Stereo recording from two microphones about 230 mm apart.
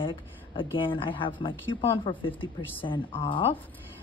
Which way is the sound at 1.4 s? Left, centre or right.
Left.